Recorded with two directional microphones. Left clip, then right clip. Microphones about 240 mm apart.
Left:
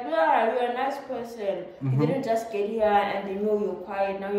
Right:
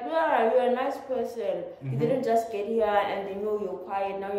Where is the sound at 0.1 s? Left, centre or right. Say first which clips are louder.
Left 1 dB; centre.